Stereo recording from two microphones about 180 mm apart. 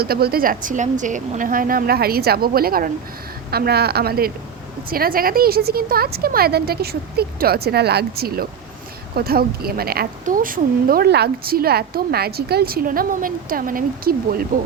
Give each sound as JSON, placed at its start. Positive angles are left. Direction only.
{"t": 0.0, "sound": "speech", "side_deg": -60}